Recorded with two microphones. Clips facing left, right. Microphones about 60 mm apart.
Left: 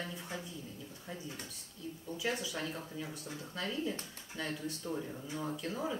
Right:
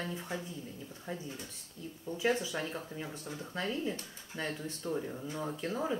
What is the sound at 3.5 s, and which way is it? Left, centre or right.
A woman's voice, right.